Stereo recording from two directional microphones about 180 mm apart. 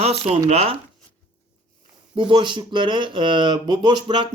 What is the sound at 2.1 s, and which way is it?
Speech, 30° right (ahead or behind).